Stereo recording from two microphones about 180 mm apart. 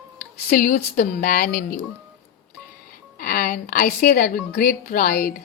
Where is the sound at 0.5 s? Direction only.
55° left (ahead or behind).